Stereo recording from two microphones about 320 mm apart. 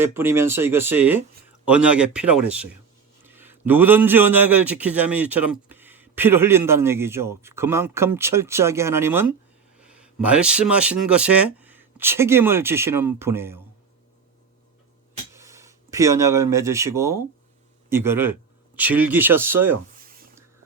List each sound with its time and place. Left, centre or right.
0.0 s a man's voice: centre
15.3 s a man's voice: centre
20.0 s a sound: right